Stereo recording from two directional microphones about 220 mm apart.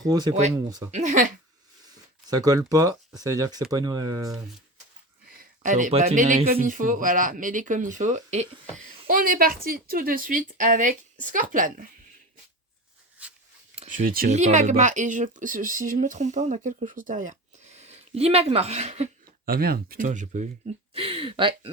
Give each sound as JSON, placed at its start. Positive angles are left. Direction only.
{"t": 0.0, "sound": "speech", "side_deg": -15}
{"t": 0.9, "sound": "speech", "side_deg": -30}
{"t": 2.3, "sound": "speech", "side_deg": -15}
{"t": 5.4, "sound": "speech", "side_deg": -35}
{"t": 9.0, "sound": "speech", "side_deg": -40}
{"t": 13.2, "sound": "a sound", "side_deg": -5}
{"t": 13.7, "sound": "speech", "side_deg": -35}
{"t": 19.5, "sound": "speech", "side_deg": -45}